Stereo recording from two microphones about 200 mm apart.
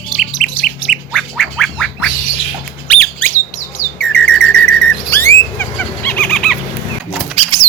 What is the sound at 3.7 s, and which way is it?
Bird, 5° left (ahead or behind).